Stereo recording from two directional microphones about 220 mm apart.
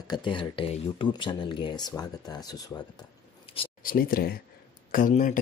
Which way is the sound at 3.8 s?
40° left (ahead or behind).